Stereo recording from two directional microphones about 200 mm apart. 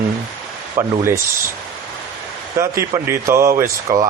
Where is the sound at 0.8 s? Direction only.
15° right (ahead or behind).